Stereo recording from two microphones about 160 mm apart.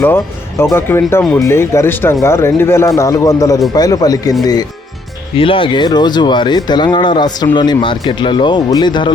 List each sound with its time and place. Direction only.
0.0 s speech: 15° left (ahead or behind)
5.4 s speech: 35° left (ahead or behind)